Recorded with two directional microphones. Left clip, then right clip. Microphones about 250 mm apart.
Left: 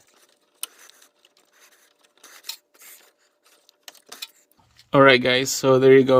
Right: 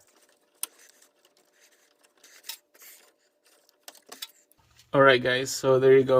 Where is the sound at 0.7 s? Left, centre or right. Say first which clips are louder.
Left 7 dB; centre.